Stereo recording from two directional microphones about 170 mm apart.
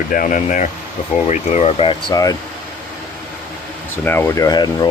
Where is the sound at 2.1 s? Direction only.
20° left (ahead or behind).